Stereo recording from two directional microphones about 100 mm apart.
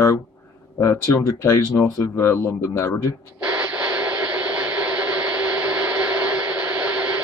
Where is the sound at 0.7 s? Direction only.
30° left (ahead or behind).